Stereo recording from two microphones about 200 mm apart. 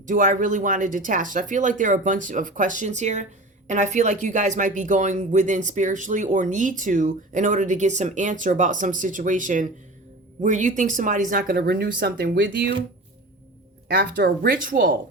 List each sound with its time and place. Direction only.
0.0 s speech: 40° right (ahead or behind)
13.9 s speech: 55° right (ahead or behind)